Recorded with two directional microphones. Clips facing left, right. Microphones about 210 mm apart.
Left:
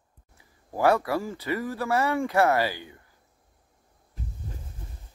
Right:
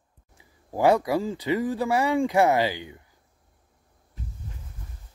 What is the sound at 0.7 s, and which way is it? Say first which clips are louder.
Speech: right 2 dB; 15° right (ahead or behind).